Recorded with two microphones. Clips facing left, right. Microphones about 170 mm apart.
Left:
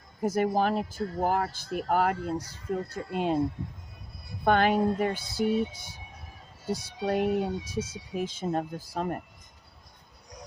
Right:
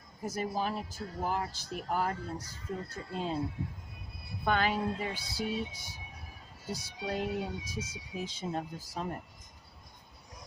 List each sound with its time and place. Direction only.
0.2 s speech: 55° left (ahead or behind); by 3.3 s 70° left (ahead or behind)
4.4 s speech: 50° left (ahead or behind)
6.7 s speech: 55° left (ahead or behind)